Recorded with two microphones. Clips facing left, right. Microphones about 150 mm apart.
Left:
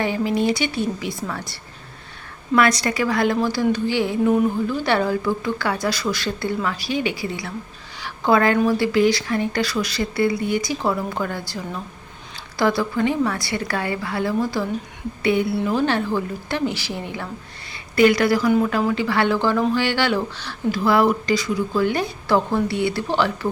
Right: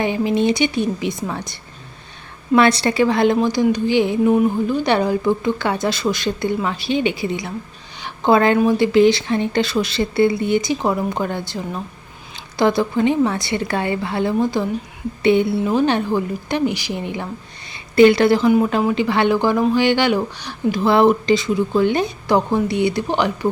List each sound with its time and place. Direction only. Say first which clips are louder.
0.0 s speech: right 3 dB; 20° right (ahead or behind)
8.0 s a sound: right 3 dB; 20° right (ahead or behind)
8.6 s speech: right 4 dB; 20° right (ahead or behind)